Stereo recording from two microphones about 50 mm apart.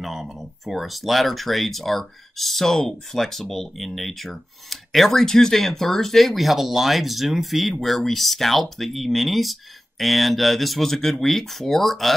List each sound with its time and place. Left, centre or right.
0.0 s speech: centre